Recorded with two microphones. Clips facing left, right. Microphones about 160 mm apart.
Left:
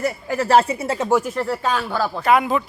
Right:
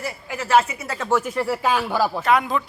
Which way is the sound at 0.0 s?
40° left (ahead or behind).